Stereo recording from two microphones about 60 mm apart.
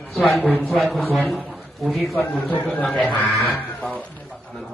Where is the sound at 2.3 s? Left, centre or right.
Left.